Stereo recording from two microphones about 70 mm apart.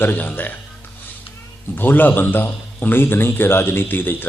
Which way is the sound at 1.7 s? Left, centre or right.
Left.